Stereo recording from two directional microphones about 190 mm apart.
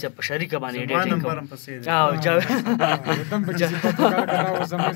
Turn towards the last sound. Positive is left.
turn(degrees=5)  # may be behind; listen again after turning